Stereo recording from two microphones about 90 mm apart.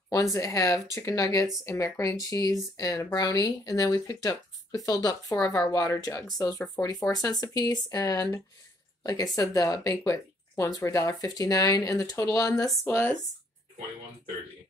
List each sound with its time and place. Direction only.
0.1 s speech: 40° left (ahead or behind)
12.8 s speech: 25° left (ahead or behind)